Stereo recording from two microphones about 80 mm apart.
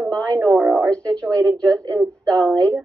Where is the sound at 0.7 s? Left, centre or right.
Centre.